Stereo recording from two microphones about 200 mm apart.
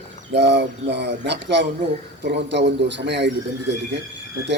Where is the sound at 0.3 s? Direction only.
60° right (ahead or behind).